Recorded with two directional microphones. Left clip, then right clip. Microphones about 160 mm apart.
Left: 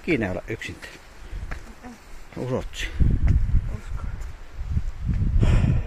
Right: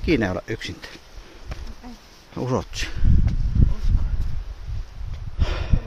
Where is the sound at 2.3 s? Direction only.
30° right (ahead or behind).